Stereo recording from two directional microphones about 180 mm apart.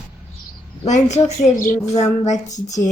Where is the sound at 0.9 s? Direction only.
40° left (ahead or behind).